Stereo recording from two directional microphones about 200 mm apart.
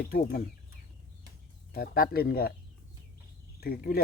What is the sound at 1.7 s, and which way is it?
Speech, 50° left (ahead or behind).